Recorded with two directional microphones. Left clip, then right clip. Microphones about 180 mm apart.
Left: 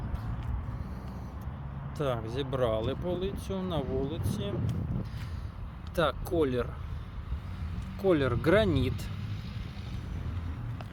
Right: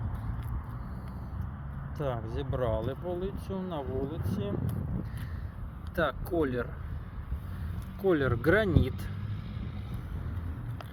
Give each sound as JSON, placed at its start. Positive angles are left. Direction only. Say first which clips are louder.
{"t": 2.0, "sound": "speech", "louder": "left 3 dB", "side_deg": 20}
{"t": 6.0, "sound": "speech", "louder": "left 1 dB", "side_deg": 15}
{"t": 7.9, "sound": "speech", "louder": "left 1 dB", "side_deg": 0}